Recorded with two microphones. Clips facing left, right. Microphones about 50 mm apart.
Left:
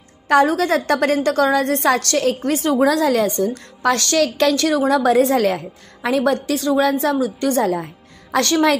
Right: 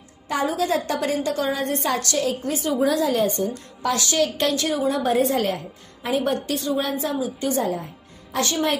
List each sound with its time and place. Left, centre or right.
0.3 s a woman's voice: left
2.0 s a woman's voice: left
2.8 s a woman's voice: left
3.5 s a woman's voice: left
4.2 s a woman's voice: left